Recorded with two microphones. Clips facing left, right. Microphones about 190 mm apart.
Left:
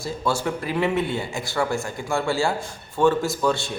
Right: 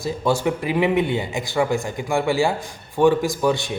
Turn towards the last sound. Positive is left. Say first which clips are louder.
# right 2 dB
turn(degrees=-15)  # may be behind; listen again after turning